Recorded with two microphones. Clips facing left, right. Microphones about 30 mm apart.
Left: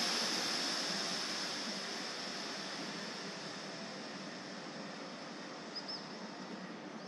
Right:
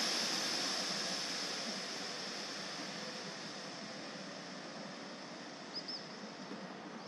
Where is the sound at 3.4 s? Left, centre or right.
Centre.